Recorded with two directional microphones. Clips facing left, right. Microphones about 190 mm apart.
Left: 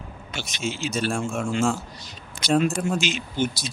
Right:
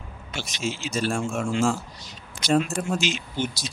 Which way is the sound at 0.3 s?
55° left (ahead or behind).